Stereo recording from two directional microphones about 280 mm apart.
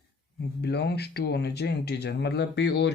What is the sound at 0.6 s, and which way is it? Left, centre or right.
Speech, left.